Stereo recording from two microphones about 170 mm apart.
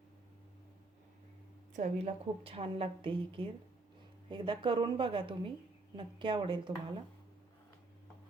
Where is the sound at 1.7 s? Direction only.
45° right (ahead or behind).